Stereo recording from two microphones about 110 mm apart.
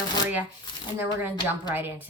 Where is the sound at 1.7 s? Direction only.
20° right (ahead or behind).